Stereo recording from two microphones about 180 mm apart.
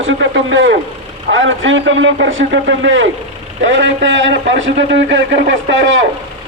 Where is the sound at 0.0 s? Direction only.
85° right.